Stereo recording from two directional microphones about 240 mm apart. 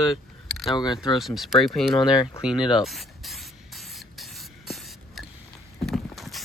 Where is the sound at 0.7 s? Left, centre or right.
Centre.